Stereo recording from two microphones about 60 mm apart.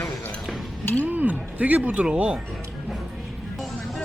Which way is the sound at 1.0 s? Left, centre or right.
Right.